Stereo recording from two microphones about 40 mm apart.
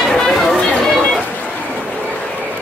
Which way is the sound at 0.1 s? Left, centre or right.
Centre.